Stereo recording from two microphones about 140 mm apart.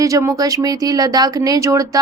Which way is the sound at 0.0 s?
20° right (ahead or behind).